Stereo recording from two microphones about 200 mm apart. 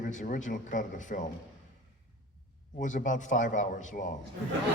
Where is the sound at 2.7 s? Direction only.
40° left (ahead or behind).